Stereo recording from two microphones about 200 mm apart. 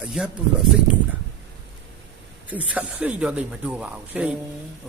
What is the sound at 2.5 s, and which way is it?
Speech, 5° right (ahead or behind).